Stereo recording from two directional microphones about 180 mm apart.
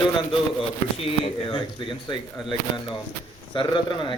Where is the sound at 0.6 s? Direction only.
30° left (ahead or behind).